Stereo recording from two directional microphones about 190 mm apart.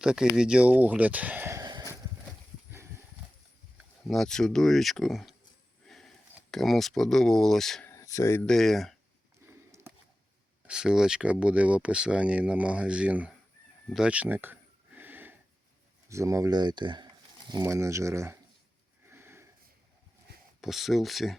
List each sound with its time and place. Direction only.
0.0 s speech: 5° right (ahead or behind)
4.0 s speech: centre (ahead or behind)
5.8 s a sound: centre (ahead or behind)
6.5 s speech: centre (ahead or behind)
7.9 s speech: 15° left (ahead or behind); by 9.0 s centre (ahead or behind)
9.5 s a sound: 15° right (ahead or behind)
10.7 s speech: 5° right (ahead or behind)
13.9 s a sound: 5° right (ahead or behind)
16.0 s speech: 15° right (ahead or behind)
19.1 s sniff: 10° right (ahead or behind)
20.6 s speech: centre (ahead or behind)